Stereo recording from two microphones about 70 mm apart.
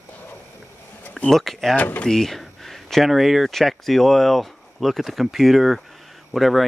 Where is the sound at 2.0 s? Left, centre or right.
Centre.